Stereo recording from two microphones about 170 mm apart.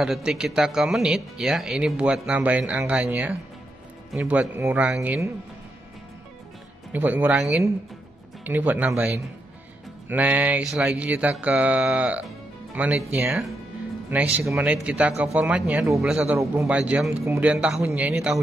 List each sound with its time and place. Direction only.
0.0 s speech: 5° right (ahead or behind)
6.9 s speech: 10° right (ahead or behind)
14.1 s speech: 15° right (ahead or behind)
17.5 s speech: 5° right (ahead or behind)